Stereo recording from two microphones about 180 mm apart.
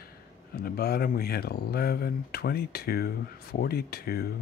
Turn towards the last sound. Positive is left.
turn(degrees=60)  # may be behind; listen again after turning